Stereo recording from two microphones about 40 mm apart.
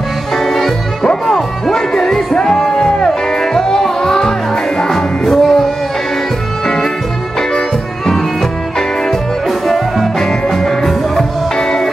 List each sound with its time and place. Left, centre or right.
0.4 s music: centre
9.5 s music: centre
10.1 s music: centre